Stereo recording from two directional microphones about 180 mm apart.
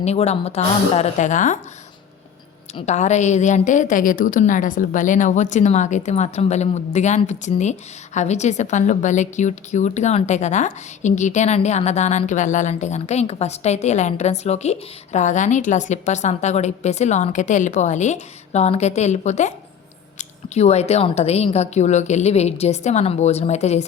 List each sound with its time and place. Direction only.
0.0 s a woman's voice: 35° left (ahead or behind)
2.7 s a woman's voice: 40° left (ahead or behind)